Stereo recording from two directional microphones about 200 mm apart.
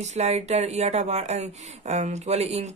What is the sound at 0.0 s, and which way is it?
Speech, 35° right (ahead or behind).